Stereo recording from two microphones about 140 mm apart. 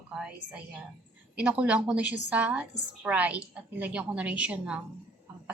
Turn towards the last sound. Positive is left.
turn(degrees=-10)  # may be behind; listen again after turning